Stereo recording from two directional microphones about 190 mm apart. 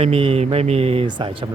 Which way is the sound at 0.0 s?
30° right (ahead or behind).